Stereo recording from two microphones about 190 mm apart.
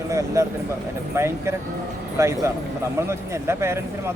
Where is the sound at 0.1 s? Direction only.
15° right (ahead or behind).